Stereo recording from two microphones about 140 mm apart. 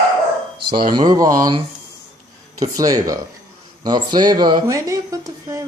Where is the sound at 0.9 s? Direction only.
30° right (ahead or behind).